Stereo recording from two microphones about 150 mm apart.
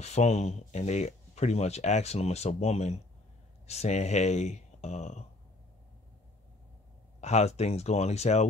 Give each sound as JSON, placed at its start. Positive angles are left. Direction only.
{"t": 0.0, "sound": "speech", "side_deg": 50}
{"t": 7.2, "sound": "speech", "side_deg": 45}